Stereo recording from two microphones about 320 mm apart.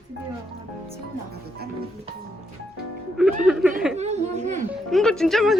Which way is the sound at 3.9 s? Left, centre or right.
Right.